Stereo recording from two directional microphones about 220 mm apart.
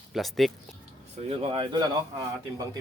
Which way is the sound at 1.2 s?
25° right (ahead or behind).